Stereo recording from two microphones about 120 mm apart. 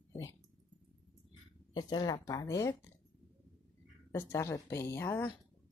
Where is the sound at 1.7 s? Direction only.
35° left (ahead or behind).